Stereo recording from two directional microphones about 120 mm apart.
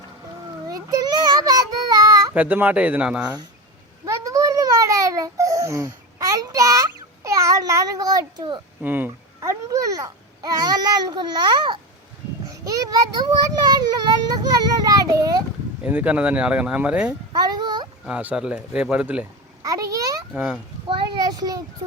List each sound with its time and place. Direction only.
0.7 s child singing: 30° right (ahead or behind)
2.3 s speech: 15° right (ahead or behind)
4.0 s babbling: 25° right (ahead or behind)
8.8 s speech: 15° right (ahead or behind)
15.8 s speech: 10° right (ahead or behind)
17.3 s a sound: 35° right (ahead or behind)
18.0 s speech: 10° right (ahead or behind)
19.6 s a sound: 30° right (ahead or behind)
20.3 s speech: 5° right (ahead or behind)
20.8 s a sound: 45° right (ahead or behind)